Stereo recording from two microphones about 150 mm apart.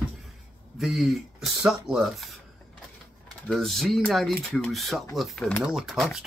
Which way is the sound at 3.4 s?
Centre (ahead or behind).